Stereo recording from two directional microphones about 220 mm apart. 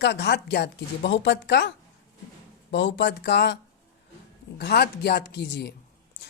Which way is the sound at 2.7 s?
55° left (ahead or behind).